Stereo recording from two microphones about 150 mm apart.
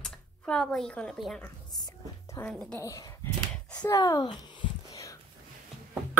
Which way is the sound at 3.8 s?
25° left (ahead or behind).